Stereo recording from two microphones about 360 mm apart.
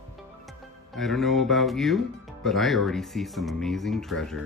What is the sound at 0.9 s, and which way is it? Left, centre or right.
Music, centre.